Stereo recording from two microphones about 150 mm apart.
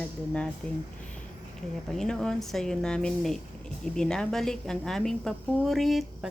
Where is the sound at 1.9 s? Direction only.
5° left (ahead or behind).